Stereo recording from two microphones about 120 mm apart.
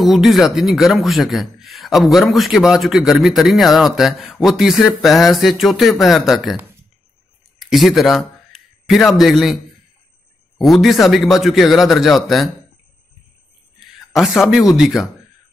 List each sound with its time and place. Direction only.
0.0 s speech: centre (ahead or behind)
7.5 s speech: centre (ahead or behind)
10.6 s speech: centre (ahead or behind)
13.7 s a sound: centre (ahead or behind)
14.8 s speech: 5° right (ahead or behind)